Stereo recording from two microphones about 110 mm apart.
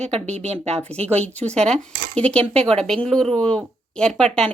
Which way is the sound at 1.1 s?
10° left (ahead or behind).